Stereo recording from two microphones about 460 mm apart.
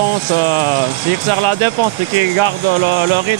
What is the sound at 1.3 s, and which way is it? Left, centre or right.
Speech, right.